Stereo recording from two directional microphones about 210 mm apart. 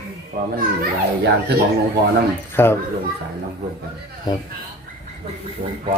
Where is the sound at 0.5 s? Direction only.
50° right (ahead or behind).